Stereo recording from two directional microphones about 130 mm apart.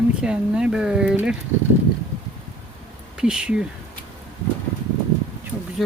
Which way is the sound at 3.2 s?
5° right (ahead or behind).